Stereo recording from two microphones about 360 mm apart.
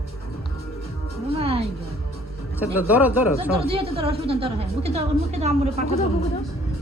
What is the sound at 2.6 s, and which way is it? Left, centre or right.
Speech, centre.